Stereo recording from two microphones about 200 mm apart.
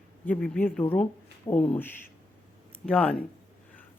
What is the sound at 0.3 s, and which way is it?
Speech, 5° left (ahead or behind).